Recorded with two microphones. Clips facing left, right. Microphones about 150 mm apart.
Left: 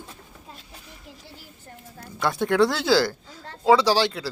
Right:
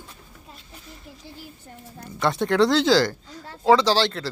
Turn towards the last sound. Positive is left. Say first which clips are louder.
# even
turn(degrees=10)  # may be behind; listen again after turning